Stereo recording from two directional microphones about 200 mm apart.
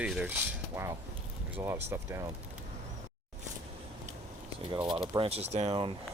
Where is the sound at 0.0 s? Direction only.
5° right (ahead or behind).